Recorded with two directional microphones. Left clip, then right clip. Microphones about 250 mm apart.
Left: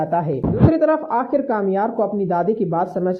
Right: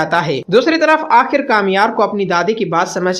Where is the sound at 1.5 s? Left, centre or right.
Centre.